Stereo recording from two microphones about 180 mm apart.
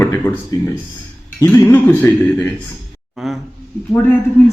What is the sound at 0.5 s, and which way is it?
A man's voice, 20° left (ahead or behind).